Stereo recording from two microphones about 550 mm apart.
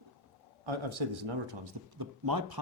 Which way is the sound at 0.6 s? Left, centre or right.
Right.